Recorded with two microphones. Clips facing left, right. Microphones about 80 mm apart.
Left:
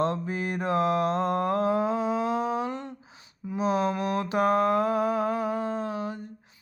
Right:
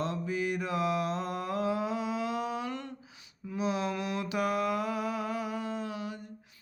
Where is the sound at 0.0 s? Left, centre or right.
Left.